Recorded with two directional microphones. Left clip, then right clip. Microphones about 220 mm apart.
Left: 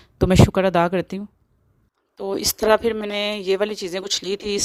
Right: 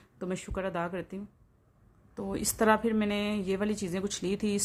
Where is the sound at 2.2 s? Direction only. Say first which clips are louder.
Left 8 dB; 40° left (ahead or behind).